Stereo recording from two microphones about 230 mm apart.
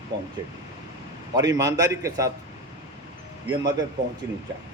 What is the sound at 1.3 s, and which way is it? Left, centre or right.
A man's voice, centre.